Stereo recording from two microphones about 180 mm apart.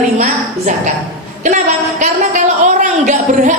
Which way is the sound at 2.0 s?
45° right (ahead or behind).